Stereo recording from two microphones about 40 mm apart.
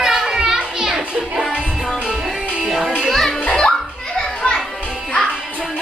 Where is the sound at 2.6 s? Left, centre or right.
Centre.